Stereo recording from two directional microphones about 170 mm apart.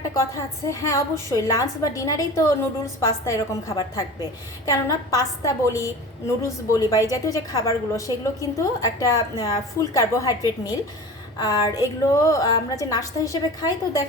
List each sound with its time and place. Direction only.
0.1 s a woman's voice: 20° left (ahead or behind)